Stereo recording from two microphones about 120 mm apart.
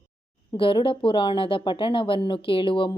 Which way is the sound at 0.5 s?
45° left (ahead or behind).